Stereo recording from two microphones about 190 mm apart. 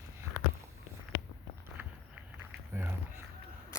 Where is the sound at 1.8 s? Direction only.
10° right (ahead or behind).